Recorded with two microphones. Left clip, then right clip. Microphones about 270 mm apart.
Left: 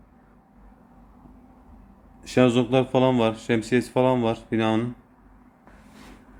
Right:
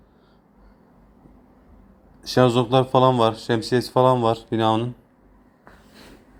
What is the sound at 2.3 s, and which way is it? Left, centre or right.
Speech, centre.